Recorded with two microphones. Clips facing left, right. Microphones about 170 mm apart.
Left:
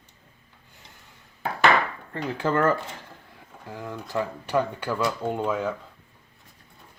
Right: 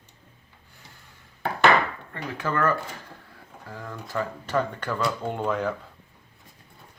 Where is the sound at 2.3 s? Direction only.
25° left (ahead or behind).